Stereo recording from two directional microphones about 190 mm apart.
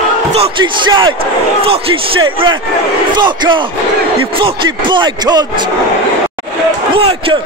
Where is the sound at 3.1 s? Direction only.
25° right (ahead or behind).